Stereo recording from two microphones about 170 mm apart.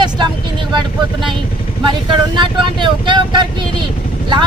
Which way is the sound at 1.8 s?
25° right (ahead or behind).